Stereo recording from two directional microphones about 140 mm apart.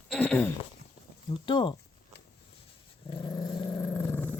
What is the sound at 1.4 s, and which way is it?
Speech, 35° left (ahead or behind).